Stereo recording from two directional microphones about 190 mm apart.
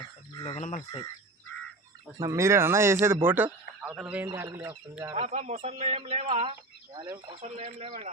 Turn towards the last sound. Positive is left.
turn(degrees=-40)  # may be behind; listen again after turning